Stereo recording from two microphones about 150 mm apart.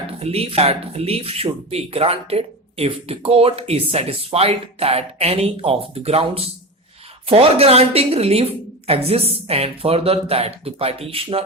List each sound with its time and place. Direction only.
0.2 s speech: 40° right (ahead or behind)